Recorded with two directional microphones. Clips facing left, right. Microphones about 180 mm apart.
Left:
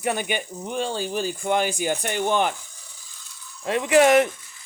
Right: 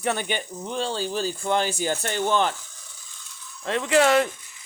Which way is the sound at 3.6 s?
15° left (ahead or behind).